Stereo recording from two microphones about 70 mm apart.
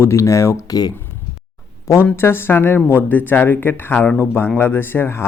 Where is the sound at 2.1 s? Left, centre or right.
Left.